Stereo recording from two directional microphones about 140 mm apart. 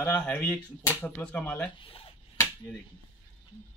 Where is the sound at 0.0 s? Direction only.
10° left (ahead or behind).